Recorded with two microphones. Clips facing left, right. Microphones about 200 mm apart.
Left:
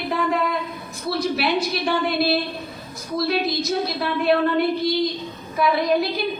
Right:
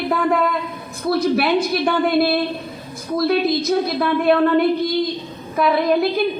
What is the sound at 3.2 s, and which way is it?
A woman's voice, 55° right (ahead or behind).